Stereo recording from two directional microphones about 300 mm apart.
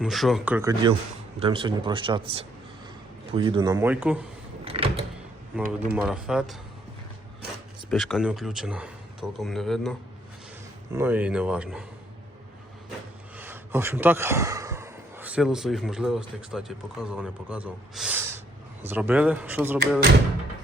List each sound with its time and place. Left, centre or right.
0.0 s a man's voice: centre
4.6 s power windows: centre
5.9 s speech: centre
7.9 s speech: centre
10.9 s speech: centre
13.3 s speech: centre